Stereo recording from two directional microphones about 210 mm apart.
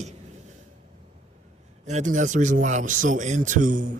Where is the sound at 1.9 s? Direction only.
35° right (ahead or behind).